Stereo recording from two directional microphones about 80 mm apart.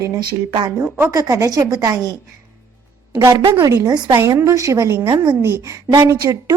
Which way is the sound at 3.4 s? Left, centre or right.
Right.